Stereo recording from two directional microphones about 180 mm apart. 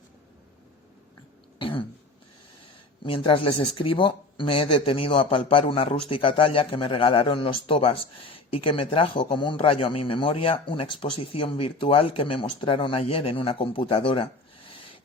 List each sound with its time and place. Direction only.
1.5 s throat clearing: 30° left (ahead or behind)
3.0 s speech: 30° left (ahead or behind)